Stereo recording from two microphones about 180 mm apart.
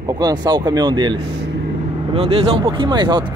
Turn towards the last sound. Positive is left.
turn(degrees=-25)  # may be behind; listen again after turning